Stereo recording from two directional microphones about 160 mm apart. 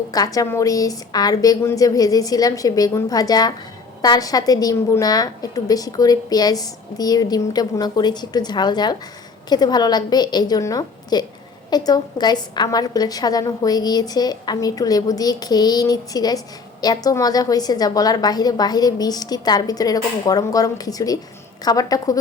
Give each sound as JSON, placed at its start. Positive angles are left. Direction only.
{"t": 0.1, "sound": "a woman's voice", "side_deg": 20}